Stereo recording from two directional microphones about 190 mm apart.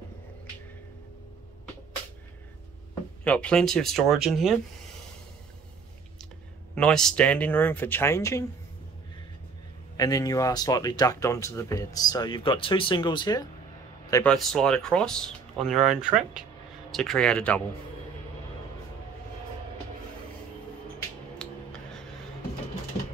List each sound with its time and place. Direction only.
2.9 s a sound: 5° left (ahead or behind)
3.9 s speech: centre (ahead or behind)
6.7 s speech: 5° left (ahead or behind)
9.9 s speech: 20° left (ahead or behind)
14.1 s speech: 5° left (ahead or behind)